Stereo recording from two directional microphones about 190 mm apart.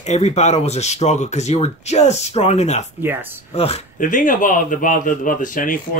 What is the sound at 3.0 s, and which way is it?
Speech, 10° right (ahead or behind).